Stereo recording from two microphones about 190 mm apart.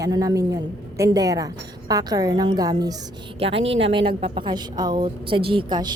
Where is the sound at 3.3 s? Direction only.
30° right (ahead or behind).